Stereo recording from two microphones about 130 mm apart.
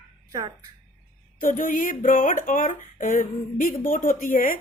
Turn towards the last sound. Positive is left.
turn(degrees=90)